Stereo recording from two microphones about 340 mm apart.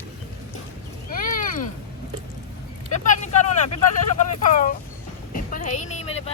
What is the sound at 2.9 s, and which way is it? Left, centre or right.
Vehicle, left.